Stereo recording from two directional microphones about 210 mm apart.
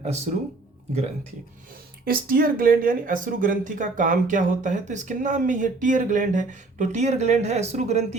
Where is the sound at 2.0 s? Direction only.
45° right (ahead or behind).